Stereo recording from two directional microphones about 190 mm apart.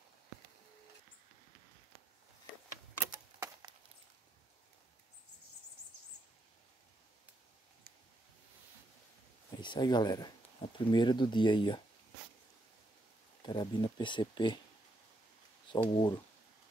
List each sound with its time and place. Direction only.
9.6 s speech: 25° left (ahead or behind)
13.5 s speech: 25° left (ahead or behind)
15.7 s speech: 25° left (ahead or behind)